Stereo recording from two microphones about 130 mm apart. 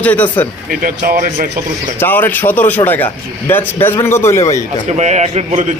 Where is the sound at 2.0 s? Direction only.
15° left (ahead or behind).